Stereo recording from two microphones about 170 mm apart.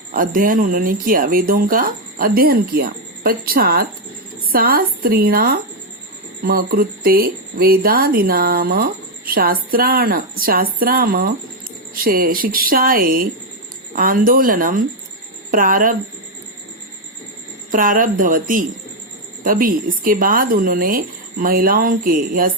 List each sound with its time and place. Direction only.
0.1 s speech: 55° right (ahead or behind)
17.7 s speech: 55° right (ahead or behind)